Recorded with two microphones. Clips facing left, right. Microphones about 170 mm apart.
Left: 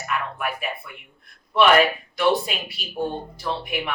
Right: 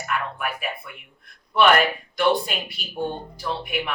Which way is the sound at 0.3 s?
Centre (ahead or behind).